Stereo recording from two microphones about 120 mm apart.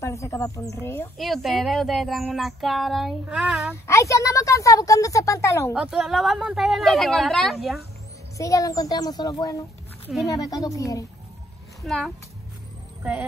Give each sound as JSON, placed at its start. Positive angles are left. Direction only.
{"t": 0.0, "sound": "speech", "side_deg": 25}
{"t": 1.1, "sound": "speech", "side_deg": 0}
{"t": 3.8, "sound": "speech", "side_deg": 25}
{"t": 5.8, "sound": "speech", "side_deg": -5}
{"t": 8.4, "sound": "a child's voice", "side_deg": 30}
{"t": 11.8, "sound": "a woman's voice", "side_deg": 0}
{"t": 13.0, "sound": "speech", "side_deg": -10}